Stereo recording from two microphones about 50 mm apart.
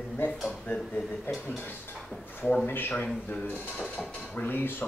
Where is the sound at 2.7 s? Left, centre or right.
Left.